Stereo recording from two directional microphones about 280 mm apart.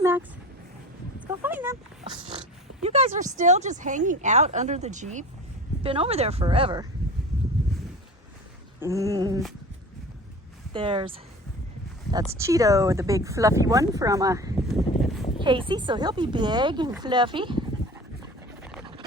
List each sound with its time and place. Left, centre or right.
0.0 s dog: centre
1.3 s oink: centre
3.3 s speech: right
8.8 s speech: centre
10.7 s speech: centre
12.1 s speech: centre
14.7 s a sound: centre
15.4 s speech: centre